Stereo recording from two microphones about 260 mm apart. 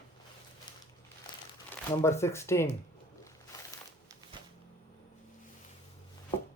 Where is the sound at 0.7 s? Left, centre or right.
Centre.